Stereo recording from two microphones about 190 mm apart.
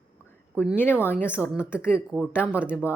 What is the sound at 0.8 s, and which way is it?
Speech, 10° left (ahead or behind).